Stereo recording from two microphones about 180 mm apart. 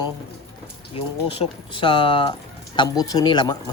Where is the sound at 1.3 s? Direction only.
30° left (ahead or behind).